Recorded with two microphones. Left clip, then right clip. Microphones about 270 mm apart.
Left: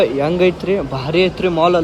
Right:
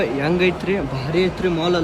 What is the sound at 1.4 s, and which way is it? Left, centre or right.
Speech, centre.